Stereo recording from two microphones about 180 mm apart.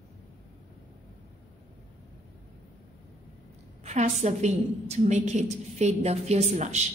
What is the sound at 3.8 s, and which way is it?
A woman's voice, 40° right (ahead or behind).